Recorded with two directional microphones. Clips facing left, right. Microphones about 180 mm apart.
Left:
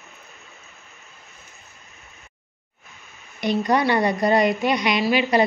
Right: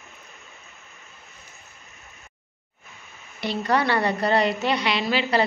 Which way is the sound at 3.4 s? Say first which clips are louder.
Left 3 dB; 15° left (ahead or behind).